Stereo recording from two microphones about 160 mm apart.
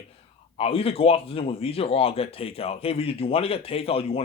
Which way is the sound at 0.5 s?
35° left (ahead or behind).